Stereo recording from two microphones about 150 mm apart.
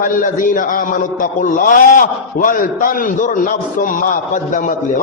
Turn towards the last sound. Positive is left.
turn(degrees=60)  # may be behind; listen again after turning